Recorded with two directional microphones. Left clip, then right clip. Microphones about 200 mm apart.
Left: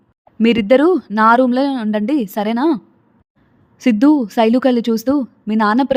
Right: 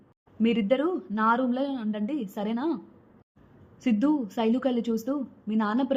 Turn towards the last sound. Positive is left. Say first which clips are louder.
# left 13 dB
turn(degrees=45)  # may be behind; listen again after turning